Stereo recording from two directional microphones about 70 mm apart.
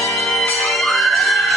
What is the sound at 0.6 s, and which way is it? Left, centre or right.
Music, centre.